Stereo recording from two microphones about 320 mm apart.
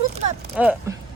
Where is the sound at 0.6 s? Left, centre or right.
Centre.